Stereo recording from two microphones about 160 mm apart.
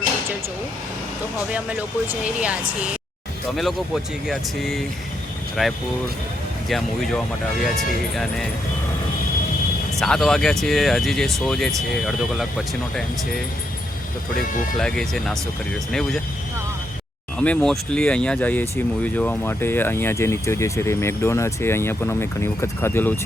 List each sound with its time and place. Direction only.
1.5 s speech: 10° right (ahead or behind)
10.0 s speech: centre (ahead or behind)
14.3 s speech: 60° left (ahead or behind)
14.8 s speech: 5° left (ahead or behind)
17.4 s speech: 5° left (ahead or behind)